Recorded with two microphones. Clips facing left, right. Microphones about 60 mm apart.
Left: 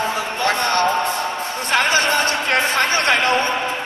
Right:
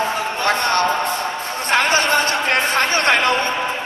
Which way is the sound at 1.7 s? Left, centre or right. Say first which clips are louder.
Right 1 dB; right.